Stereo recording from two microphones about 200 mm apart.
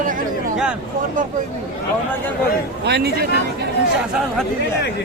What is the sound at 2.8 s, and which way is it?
Speech, 55° right (ahead or behind).